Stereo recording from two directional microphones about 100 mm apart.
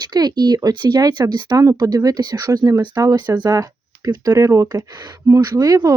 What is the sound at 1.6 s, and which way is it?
Speech, 35° right (ahead or behind).